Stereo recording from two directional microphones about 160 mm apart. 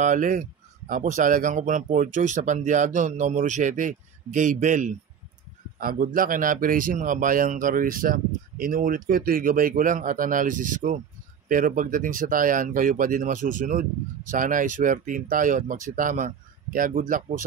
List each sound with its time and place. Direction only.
0.0 s speech: 55° right (ahead or behind)
5.8 s speech: 65° right (ahead or behind)